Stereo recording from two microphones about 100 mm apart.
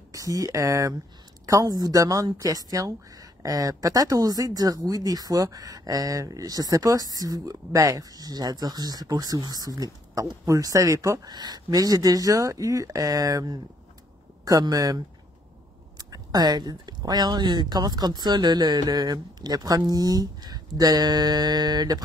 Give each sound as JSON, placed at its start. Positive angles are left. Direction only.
{"t": 0.1, "sound": "speech", "side_deg": -35}
{"t": 16.0, "sound": "speech", "side_deg": -40}